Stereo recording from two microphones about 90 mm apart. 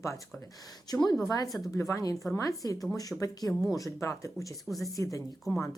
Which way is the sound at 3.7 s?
30° left (ahead or behind).